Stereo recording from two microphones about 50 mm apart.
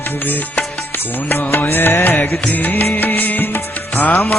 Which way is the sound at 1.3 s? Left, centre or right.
Left.